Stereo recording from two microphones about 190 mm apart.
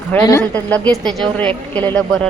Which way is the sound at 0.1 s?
15° left (ahead or behind).